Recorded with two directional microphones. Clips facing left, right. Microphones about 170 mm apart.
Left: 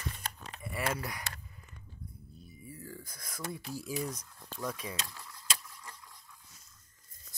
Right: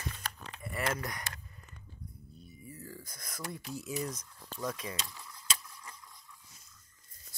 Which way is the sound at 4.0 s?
Centre (ahead or behind).